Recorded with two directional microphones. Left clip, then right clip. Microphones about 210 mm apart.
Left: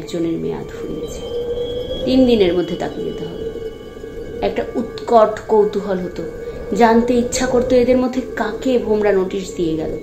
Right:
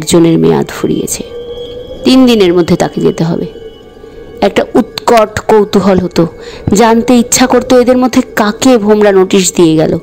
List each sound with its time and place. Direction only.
0.0 s a woman's voice: 55° right (ahead or behind)
2.0 s a woman's voice: 55° right (ahead or behind)
4.4 s a woman's voice: 55° right (ahead or behind)